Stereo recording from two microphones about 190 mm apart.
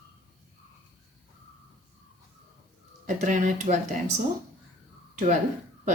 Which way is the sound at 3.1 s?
40° right (ahead or behind).